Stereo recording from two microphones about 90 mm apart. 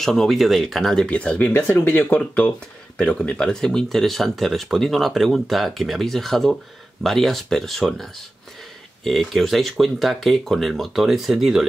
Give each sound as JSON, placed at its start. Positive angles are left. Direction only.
{"t": 0.0, "sound": "speech", "side_deg": 5}
{"t": 1.5, "sound": "speech", "side_deg": 25}
{"t": 2.1, "sound": "speech", "side_deg": 10}